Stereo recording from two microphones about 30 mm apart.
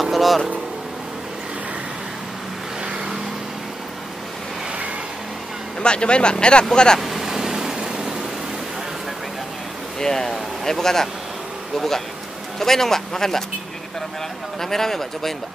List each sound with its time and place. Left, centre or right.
0.0 s vehicle: centre
5.8 s speech: left
7.0 s vehicle: centre
9.9 s speech: centre
14.6 s speech: centre